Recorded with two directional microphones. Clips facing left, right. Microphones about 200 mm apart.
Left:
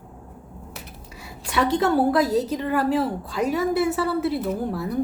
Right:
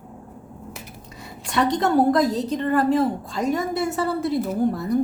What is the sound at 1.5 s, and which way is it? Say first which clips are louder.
A woman's voice: even; 5° left (ahead or behind).